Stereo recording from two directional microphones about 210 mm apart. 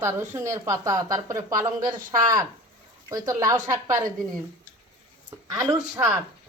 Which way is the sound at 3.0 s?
15° right (ahead or behind).